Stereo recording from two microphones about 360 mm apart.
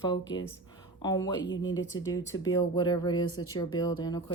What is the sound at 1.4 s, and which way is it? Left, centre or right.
Speech, left.